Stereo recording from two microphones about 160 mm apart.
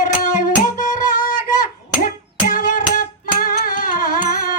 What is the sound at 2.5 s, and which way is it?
Music, 55° left (ahead or behind).